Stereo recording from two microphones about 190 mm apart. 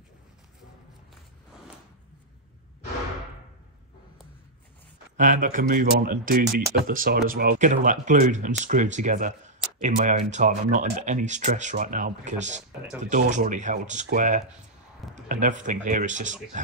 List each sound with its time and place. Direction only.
5.1 s speech: 40° right (ahead or behind)